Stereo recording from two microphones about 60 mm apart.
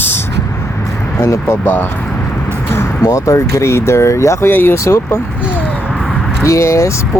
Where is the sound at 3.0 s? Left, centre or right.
Left.